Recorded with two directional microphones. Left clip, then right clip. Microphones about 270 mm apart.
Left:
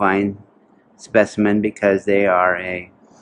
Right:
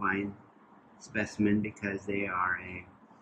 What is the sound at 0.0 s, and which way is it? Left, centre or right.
Speech, centre.